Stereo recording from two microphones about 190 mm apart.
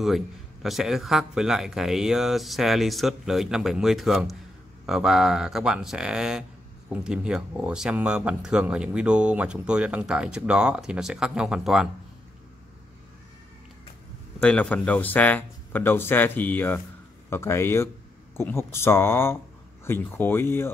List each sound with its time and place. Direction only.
0.0 s speech: centre (ahead or behind)
14.4 s speech: 5° left (ahead or behind)